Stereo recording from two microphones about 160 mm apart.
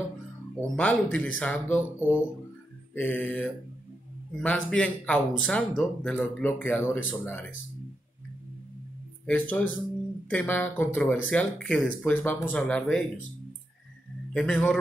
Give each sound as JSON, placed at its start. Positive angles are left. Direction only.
{"t": 0.6, "sound": "speech", "side_deg": 10}
{"t": 9.2, "sound": "speech", "side_deg": 10}
{"t": 14.3, "sound": "a man's voice", "side_deg": 5}